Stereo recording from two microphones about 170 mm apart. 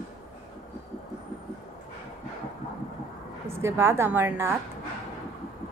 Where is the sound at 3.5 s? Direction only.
15° right (ahead or behind).